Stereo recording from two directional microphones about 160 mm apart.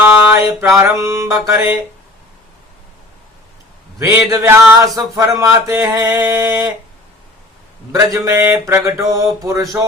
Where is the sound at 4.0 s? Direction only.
15° right (ahead or behind).